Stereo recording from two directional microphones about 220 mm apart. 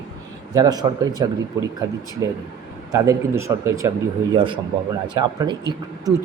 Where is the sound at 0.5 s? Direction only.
15° right (ahead or behind).